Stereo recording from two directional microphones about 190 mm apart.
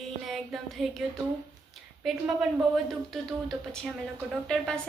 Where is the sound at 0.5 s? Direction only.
Centre (ahead or behind).